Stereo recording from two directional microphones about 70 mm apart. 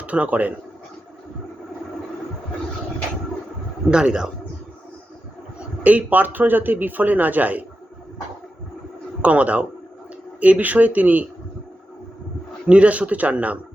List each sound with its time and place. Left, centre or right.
0.0 s speech: centre
3.8 s speech: centre
5.5 s a man's voice: right
9.2 s a man's voice: right
12.6 s a man's voice: centre